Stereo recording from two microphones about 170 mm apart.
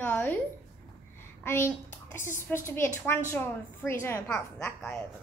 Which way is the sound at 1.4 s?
15° left (ahead or behind).